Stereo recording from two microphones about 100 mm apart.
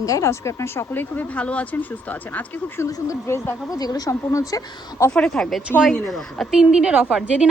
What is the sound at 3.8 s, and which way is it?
Speech, 40° left (ahead or behind).